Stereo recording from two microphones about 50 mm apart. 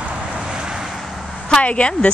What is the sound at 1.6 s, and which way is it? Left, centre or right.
Speech, left.